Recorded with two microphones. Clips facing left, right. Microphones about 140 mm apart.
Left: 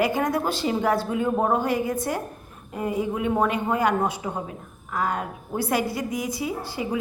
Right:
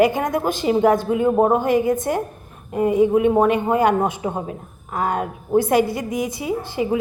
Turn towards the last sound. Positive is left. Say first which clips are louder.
# right 6 dB
turn(degrees=-20)  # may be behind; listen again after turning